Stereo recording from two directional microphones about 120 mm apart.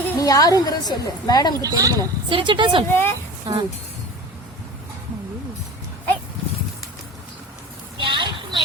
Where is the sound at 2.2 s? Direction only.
45° right (ahead or behind).